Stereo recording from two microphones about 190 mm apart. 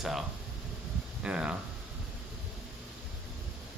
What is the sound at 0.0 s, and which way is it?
Speech, centre (ahead or behind).